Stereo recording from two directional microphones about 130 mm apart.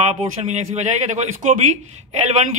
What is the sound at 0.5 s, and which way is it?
A man's voice, 65° right (ahead or behind).